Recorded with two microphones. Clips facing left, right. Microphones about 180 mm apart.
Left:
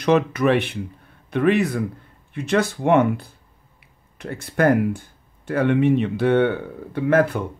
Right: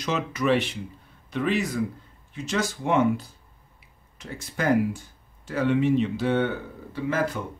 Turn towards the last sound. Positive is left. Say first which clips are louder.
# left 8 dB
turn(degrees=60)  # may be behind; listen again after turning